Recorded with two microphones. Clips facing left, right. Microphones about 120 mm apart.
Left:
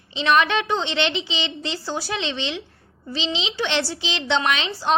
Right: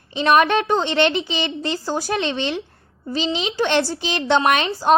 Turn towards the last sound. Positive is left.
turn(degrees=-45)  # may be behind; listen again after turning